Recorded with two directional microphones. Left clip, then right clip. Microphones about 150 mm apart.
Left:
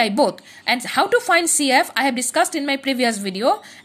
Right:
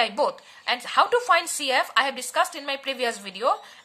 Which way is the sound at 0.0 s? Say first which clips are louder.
Left 5 dB; 25° left (ahead or behind).